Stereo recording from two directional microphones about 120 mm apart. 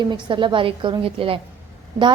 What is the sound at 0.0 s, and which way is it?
A woman's voice, 40° right (ahead or behind).